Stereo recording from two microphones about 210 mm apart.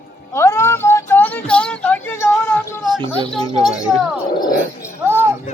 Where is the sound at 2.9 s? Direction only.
25° right (ahead or behind).